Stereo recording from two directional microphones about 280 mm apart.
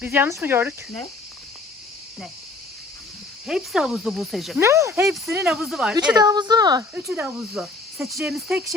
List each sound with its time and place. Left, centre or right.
0.0 s speech: centre
3.4 s speech: centre
6.1 s speech: centre